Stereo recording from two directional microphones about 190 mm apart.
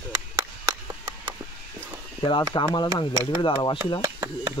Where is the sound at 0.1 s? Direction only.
15° right (ahead or behind).